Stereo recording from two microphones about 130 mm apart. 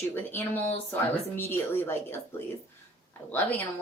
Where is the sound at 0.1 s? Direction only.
15° left (ahead or behind).